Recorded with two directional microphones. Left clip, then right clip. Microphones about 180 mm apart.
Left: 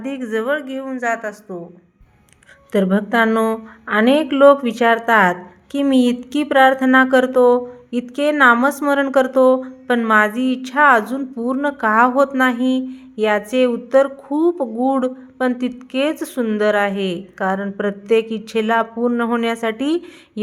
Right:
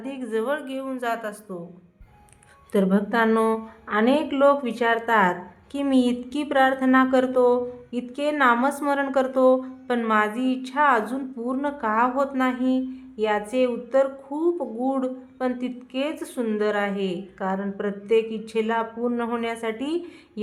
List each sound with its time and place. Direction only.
0.0 s a woman's voice: 20° left (ahead or behind)
2.7 s a woman's voice: 25° left (ahead or behind)